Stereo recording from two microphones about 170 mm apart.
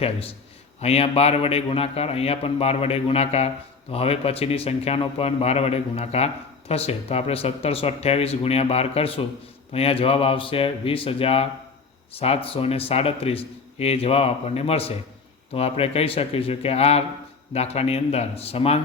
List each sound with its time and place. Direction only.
0.0 s a man's voice: 35° left (ahead or behind)